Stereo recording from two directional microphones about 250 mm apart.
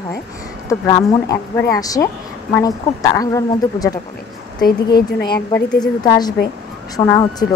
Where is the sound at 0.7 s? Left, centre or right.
Centre.